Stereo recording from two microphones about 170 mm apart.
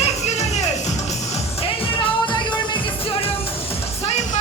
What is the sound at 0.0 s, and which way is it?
Music, 40° left (ahead or behind).